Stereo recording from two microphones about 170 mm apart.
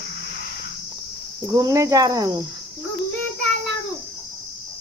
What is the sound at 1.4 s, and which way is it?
Speech, 20° right (ahead or behind).